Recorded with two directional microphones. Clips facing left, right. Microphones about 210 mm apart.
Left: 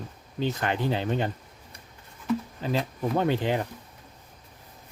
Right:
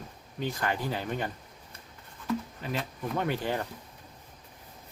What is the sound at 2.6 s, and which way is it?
Speech, 30° left (ahead or behind).